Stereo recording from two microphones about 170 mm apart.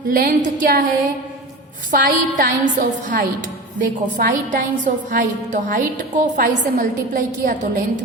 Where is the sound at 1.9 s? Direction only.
50° right (ahead or behind).